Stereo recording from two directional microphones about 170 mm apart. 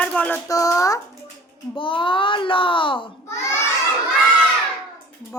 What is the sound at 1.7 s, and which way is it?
A child's voice, 30° left (ahead or behind).